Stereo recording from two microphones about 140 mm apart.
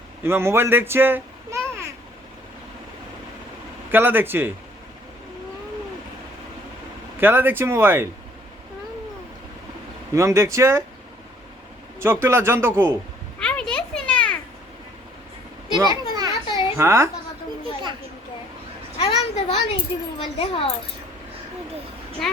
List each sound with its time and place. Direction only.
0.2 s speech: 15° right (ahead or behind)
3.9 s speech: 15° right (ahead or behind)
7.2 s speech: 15° right (ahead or behind)
10.2 s a man's voice: 20° right (ahead or behind)
11.9 s a man's voice: 20° right (ahead or behind)
13.4 s a sound: 5° left (ahead or behind)
15.7 s children playing: 30° right (ahead or behind)
16.5 s a sound: 35° left (ahead or behind)
16.7 s speech: 20° right (ahead or behind)
18.9 s a sound: 45° left (ahead or behind)
20.1 s speech: 40° left (ahead or behind)